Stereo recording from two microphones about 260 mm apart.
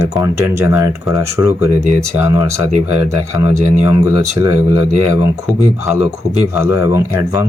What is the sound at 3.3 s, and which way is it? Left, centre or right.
Speech, centre.